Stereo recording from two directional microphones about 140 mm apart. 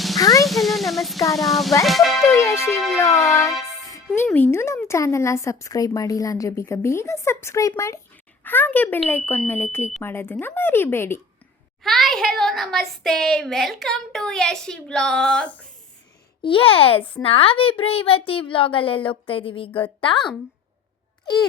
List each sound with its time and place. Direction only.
0.2 s music: 25° left (ahead or behind)
0.4 s music: centre (ahead or behind)
1.4 s a child's voice: centre (ahead or behind)
2.3 s a woman's voice: 20° left (ahead or behind)
11.8 s a child's voice: centre (ahead or behind)
16.4 s a woman's voice: 40° left (ahead or behind)